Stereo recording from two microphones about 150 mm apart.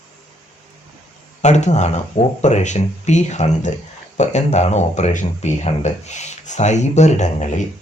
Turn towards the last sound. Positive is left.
turn(degrees=55)  # may be behind; listen again after turning